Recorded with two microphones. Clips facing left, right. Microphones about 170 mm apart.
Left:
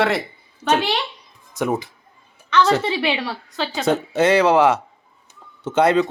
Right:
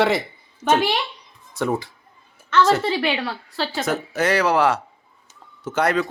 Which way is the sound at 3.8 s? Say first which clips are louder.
Left 6 dB; 25° left (ahead or behind).